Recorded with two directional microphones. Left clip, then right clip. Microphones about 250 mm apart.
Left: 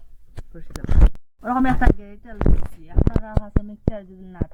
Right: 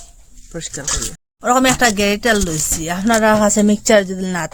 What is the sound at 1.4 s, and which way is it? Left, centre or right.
Speech, right.